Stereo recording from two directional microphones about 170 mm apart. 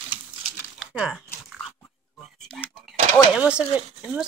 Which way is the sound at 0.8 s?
5° right (ahead or behind).